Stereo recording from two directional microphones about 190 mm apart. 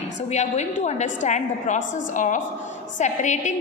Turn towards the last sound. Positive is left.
turn(degrees=40)  # may be behind; listen again after turning